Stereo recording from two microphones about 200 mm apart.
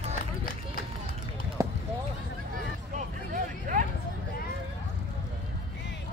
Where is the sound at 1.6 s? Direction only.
15° right (ahead or behind).